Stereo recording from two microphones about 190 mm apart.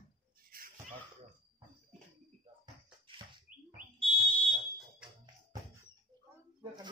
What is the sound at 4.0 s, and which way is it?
Fire alarm, 25° right (ahead or behind).